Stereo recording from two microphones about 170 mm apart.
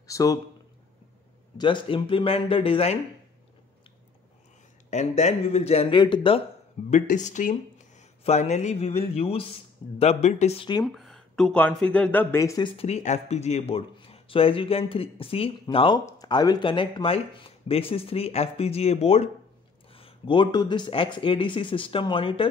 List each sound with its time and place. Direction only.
0.0 s a man's voice: 20° left (ahead or behind)
1.6 s speech: 25° left (ahead or behind)
4.9 s speech: 40° left (ahead or behind)
6.9 s speech: 45° left (ahead or behind)
10.8 s speech: centre (ahead or behind); by 12.6 s 15° left (ahead or behind)
12.6 s speech: 35° left (ahead or behind)